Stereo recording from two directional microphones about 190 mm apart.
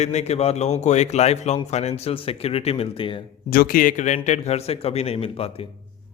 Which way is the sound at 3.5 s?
50° left (ahead or behind).